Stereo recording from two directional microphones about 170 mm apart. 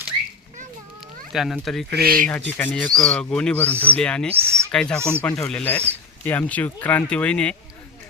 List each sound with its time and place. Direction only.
1.3 s speech: centre (ahead or behind)
2.0 s speech: 60° right (ahead or behind)
2.5 s speech: 10° left (ahead or behind)
4.4 s a sound: 15° right (ahead or behind)
4.7 s speech: 5° left (ahead or behind)
4.9 s speech: 15° right (ahead or behind)
5.2 s speech: 5° left (ahead or behind)